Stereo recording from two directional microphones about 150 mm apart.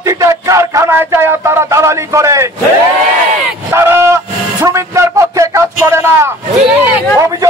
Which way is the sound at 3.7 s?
15° right (ahead or behind).